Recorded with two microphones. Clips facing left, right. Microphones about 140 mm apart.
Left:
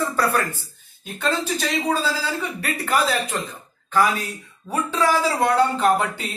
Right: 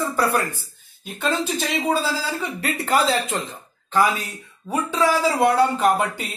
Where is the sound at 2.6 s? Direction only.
25° right (ahead or behind).